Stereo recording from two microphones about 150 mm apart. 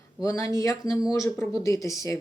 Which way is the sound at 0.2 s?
25° left (ahead or behind).